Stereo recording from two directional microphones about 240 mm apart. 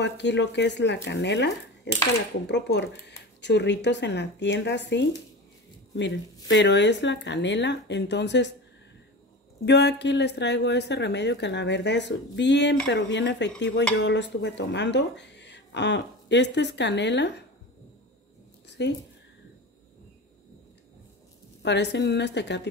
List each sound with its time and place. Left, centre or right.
0.0 s speech: left
6.5 s speech: left
9.7 s speech: left
18.7 s a sound: left
21.6 s speech: left